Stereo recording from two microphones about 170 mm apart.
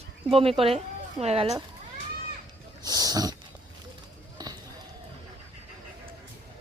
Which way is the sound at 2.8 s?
20° right (ahead or behind).